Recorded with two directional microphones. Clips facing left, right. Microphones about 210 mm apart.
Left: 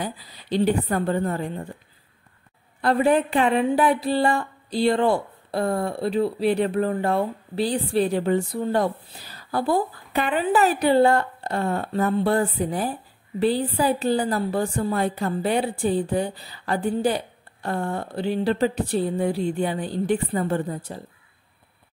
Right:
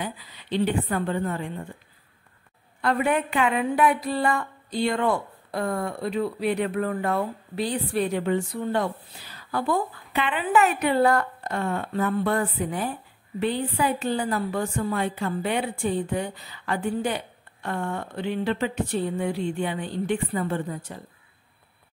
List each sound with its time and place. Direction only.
0.0 s speech: 35° left (ahead or behind)
2.8 s speech: 35° left (ahead or behind)